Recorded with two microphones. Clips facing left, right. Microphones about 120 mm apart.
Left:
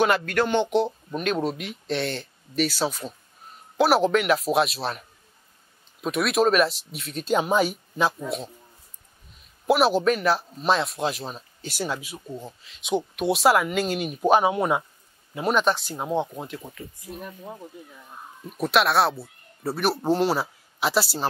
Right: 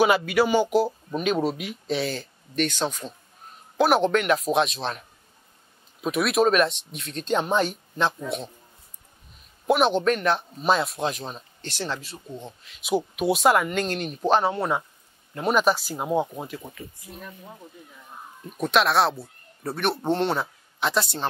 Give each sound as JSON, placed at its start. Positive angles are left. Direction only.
{"t": 0.0, "sound": "speech", "side_deg": -5}
{"t": 9.7, "sound": "speech", "side_deg": 5}
{"t": 17.1, "sound": "speech", "side_deg": 20}
{"t": 18.4, "sound": "speech", "side_deg": 0}